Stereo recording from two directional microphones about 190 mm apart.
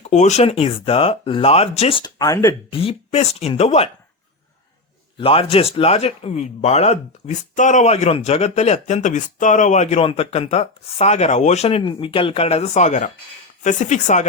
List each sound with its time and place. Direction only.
0.0 s speech: 35° left (ahead or behind); by 2.7 s 15° left (ahead or behind)
2.7 s a man's voice: 30° left (ahead or behind)
5.1 s a man's voice: 30° left (ahead or behind)